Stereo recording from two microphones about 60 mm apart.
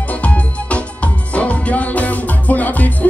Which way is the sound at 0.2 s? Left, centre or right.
Left.